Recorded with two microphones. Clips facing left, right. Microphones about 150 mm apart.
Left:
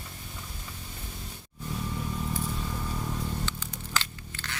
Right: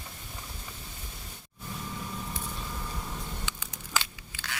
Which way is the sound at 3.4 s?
10° right (ahead or behind).